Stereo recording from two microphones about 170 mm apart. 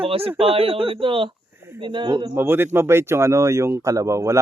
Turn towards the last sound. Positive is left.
turn(degrees=-15)  # may be behind; listen again after turning